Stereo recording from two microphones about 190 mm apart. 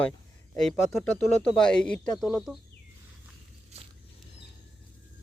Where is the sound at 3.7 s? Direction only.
35° right (ahead or behind).